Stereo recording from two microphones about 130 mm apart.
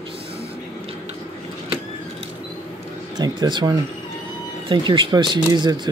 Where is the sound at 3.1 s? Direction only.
30° right (ahead or behind).